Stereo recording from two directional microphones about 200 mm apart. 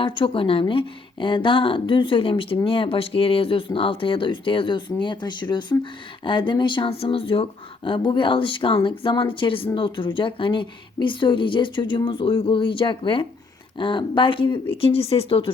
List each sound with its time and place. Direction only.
0.0 s a woman's voice: 25° left (ahead or behind)